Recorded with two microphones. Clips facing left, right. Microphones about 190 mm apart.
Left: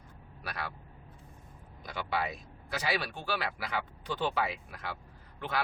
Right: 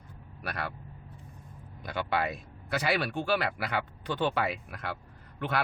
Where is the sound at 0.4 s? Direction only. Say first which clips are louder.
Right 4 dB; 60° right (ahead or behind).